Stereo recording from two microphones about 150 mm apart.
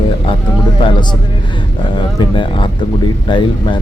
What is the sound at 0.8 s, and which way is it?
Speech, 30° left (ahead or behind).